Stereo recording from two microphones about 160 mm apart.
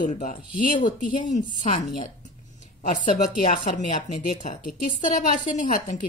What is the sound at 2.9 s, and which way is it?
Speech, 55° left (ahead or behind).